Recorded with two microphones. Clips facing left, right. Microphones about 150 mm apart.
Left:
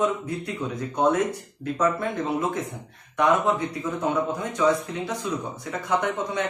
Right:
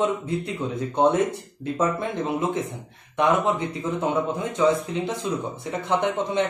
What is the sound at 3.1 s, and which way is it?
A man's voice, 25° right (ahead or behind).